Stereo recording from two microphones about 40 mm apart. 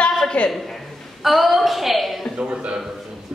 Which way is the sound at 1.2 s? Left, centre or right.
Centre.